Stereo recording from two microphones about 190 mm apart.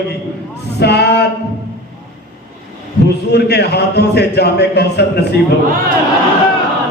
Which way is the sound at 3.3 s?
60° left (ahead or behind).